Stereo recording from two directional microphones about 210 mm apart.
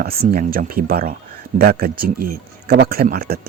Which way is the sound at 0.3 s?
45° right (ahead or behind).